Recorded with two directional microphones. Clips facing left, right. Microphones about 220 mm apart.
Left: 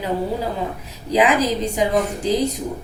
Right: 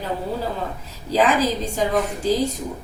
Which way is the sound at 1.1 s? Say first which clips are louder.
Left 2 dB; 15° left (ahead or behind).